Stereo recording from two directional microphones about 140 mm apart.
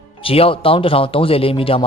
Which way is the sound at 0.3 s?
40° left (ahead or behind).